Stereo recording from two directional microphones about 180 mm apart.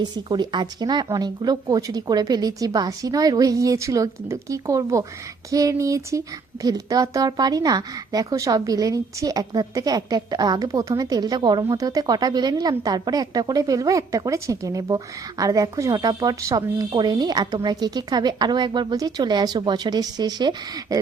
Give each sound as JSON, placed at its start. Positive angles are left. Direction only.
{"t": 0.0, "sound": "speech", "side_deg": -25}